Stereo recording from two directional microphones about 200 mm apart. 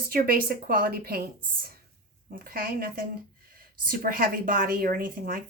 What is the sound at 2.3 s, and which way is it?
A woman's voice, 45° right (ahead or behind).